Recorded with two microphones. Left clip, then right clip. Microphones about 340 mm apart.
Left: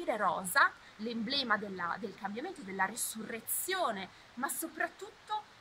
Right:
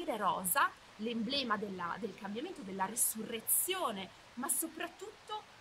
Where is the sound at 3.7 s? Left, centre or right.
Centre.